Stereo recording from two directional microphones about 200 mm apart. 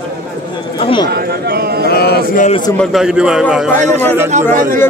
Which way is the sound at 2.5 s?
25° left (ahead or behind).